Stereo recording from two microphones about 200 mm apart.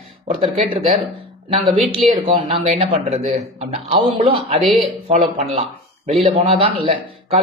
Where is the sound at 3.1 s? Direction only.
30° right (ahead or behind).